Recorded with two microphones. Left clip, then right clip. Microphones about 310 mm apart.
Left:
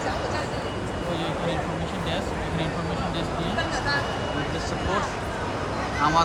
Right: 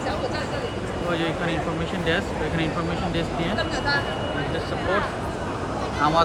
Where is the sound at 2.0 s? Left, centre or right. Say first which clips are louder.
Right 6 dB; centre.